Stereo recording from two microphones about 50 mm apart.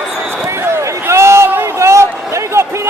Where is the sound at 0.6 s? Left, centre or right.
Right.